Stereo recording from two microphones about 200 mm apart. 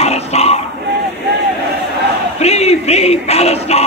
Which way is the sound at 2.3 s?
30° left (ahead or behind).